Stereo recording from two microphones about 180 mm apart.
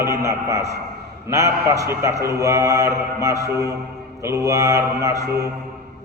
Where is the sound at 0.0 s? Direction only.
20° right (ahead or behind).